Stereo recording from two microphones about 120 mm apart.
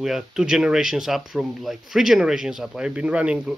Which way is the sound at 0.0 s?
5° right (ahead or behind).